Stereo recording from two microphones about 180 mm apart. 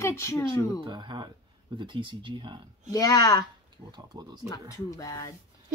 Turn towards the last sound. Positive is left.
turn(degrees=20)  # may be behind; listen again after turning